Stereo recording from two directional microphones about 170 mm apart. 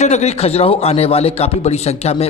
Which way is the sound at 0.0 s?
40° left (ahead or behind).